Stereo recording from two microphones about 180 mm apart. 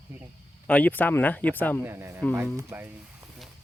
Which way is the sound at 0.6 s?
10° left (ahead or behind).